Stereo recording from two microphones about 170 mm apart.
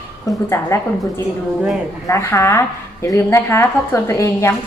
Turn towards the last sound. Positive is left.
turn(degrees=15)  # may be behind; listen again after turning